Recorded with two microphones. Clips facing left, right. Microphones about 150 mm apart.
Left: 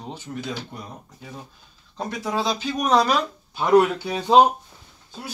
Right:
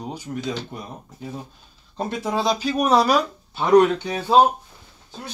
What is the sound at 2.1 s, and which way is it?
Speech, 20° right (ahead or behind).